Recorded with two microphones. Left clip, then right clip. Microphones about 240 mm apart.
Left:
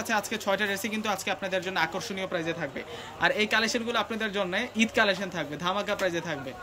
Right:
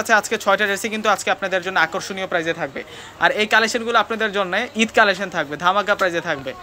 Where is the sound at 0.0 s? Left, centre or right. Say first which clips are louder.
Right 11 dB; centre.